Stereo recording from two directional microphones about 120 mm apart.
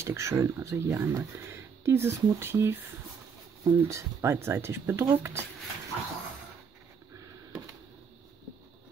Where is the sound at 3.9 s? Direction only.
25° right (ahead or behind).